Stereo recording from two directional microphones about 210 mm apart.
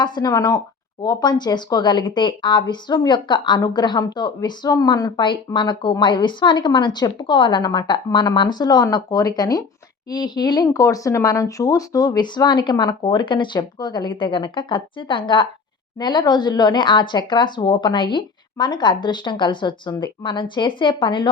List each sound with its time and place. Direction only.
0.0 s speech: 20° left (ahead or behind)